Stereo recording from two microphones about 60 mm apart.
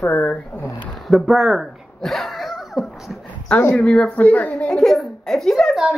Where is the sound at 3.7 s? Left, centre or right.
Centre.